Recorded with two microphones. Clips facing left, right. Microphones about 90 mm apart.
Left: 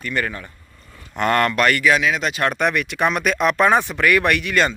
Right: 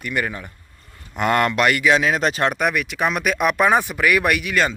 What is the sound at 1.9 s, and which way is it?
Speech, 35° right (ahead or behind).